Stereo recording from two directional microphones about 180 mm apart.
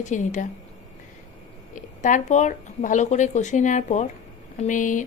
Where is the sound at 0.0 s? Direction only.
45° left (ahead or behind).